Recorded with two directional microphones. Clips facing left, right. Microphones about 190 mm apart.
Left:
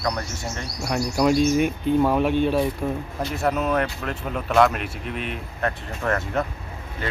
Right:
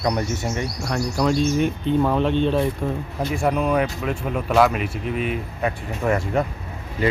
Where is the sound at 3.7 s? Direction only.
5° right (ahead or behind).